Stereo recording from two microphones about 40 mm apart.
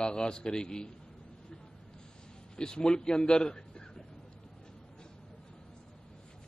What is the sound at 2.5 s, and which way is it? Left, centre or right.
Speech, left.